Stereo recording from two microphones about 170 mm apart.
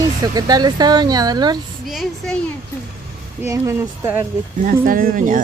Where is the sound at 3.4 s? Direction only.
15° right (ahead or behind).